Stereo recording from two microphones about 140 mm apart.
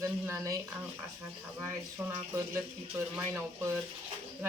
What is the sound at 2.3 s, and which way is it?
Speech, 15° right (ahead or behind).